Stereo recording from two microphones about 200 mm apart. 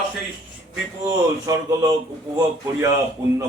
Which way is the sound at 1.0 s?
15° right (ahead or behind).